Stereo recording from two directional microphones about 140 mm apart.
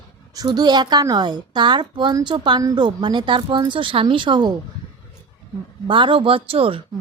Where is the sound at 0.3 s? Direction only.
30° right (ahead or behind).